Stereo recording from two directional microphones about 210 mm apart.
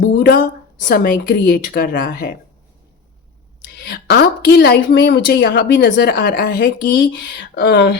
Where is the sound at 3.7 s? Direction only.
50° left (ahead or behind).